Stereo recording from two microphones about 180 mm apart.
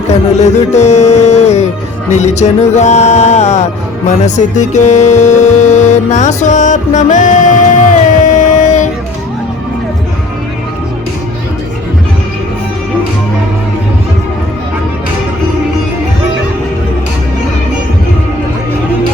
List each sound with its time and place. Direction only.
0.1 s music: 40° left (ahead or behind)